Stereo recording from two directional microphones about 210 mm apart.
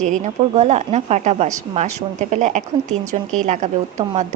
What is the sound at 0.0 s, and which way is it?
Speech, 35° right (ahead or behind).